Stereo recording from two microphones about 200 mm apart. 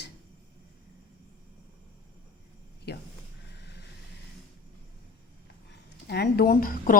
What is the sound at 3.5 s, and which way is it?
Vehicle, 55° left (ahead or behind).